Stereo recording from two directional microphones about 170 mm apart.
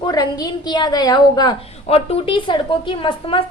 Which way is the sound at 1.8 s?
35° left (ahead or behind).